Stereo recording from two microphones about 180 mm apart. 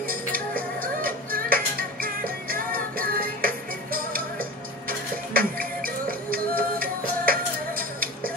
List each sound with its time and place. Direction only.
0.1 s music: 55° right (ahead or behind)